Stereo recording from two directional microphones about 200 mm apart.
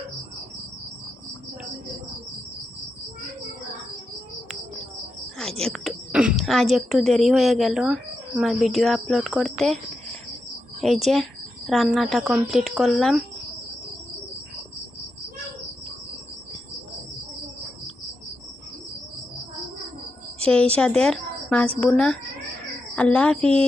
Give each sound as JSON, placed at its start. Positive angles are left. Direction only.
{"t": 5.4, "sound": "a woman's voice", "side_deg": 5}
{"t": 10.8, "sound": "a woman's voice", "side_deg": 0}
{"t": 20.4, "sound": "a woman's voice", "side_deg": 5}
{"t": 23.4, "sound": "speech", "side_deg": -30}